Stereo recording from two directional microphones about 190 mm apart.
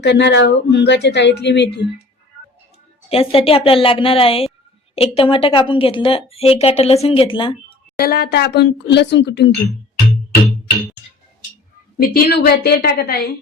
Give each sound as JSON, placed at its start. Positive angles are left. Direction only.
{"t": 0.0, "sound": "speech", "side_deg": 65}
{"t": 3.1, "sound": "speech", "side_deg": 30}
{"t": 7.9, "sound": "speech", "side_deg": 55}
{"t": 11.9, "sound": "a woman's voice", "side_deg": 55}